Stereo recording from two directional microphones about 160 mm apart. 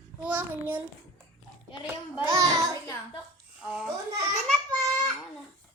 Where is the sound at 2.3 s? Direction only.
25° right (ahead or behind).